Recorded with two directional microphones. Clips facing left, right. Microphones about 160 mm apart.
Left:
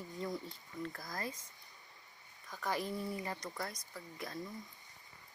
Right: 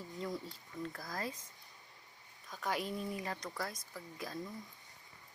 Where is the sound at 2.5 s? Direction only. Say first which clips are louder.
Even; 10° right (ahead or behind).